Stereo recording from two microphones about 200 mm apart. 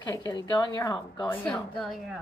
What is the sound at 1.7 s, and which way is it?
Speech, centre (ahead or behind).